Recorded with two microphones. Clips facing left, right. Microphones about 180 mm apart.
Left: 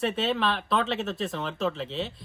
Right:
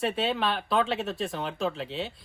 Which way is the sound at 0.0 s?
Centre (ahead or behind).